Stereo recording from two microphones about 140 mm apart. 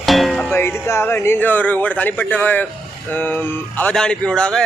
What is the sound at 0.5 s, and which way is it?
A man's voice, 20° left (ahead or behind).